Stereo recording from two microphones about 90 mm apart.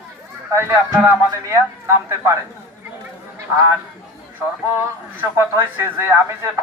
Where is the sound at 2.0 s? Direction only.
30° right (ahead or behind).